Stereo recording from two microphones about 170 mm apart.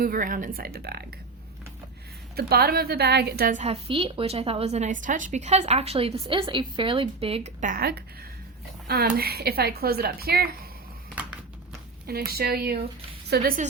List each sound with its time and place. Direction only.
0.0 s speech: 55° right (ahead or behind)
2.3 s a woman's voice: 65° right (ahead or behind)
3.5 s a woman's voice: 40° right (ahead or behind)
7.6 s speech: 60° right (ahead or behind)
11.1 s a sound: 10° right (ahead or behind)
12.0 s speech: 65° right (ahead or behind)